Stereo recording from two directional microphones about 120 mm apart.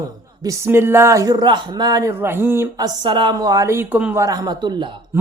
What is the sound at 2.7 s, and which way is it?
A woman's voice, 35° right (ahead or behind).